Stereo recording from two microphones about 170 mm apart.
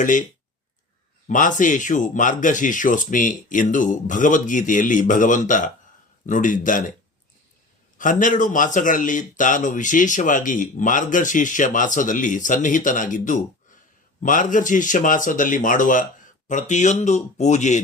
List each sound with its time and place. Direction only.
0.0 s a man's voice: 50° left (ahead or behind)
1.3 s a man's voice: 50° left (ahead or behind)
7.9 s a man's voice: 50° left (ahead or behind)